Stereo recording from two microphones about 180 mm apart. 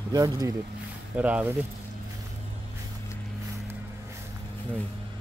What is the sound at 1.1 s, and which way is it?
Speech, 10° right (ahead or behind).